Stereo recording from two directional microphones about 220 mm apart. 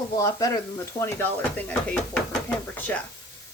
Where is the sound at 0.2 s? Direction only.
15° left (ahead or behind).